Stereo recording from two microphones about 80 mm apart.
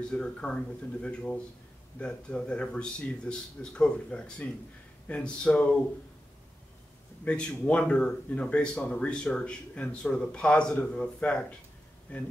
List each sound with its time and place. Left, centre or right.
0.0 s speech: centre
7.2 s speech: centre